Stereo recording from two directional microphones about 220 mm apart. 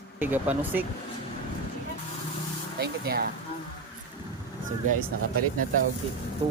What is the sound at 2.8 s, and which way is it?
Speech, 45° right (ahead or behind).